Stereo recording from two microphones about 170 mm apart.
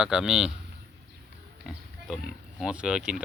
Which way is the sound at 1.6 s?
Centre (ahead or behind).